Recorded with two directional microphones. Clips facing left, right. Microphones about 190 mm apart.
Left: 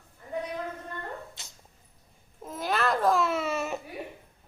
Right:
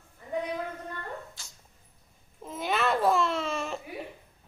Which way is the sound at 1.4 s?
20° left (ahead or behind).